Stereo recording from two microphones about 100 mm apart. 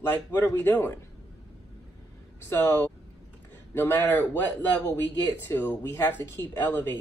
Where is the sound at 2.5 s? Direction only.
20° left (ahead or behind).